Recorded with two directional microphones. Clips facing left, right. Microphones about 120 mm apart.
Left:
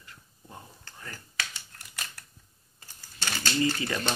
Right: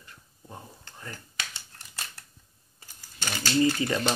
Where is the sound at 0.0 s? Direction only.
25° right (ahead or behind).